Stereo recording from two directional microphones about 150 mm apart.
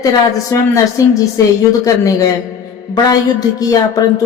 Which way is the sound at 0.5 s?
20° left (ahead or behind).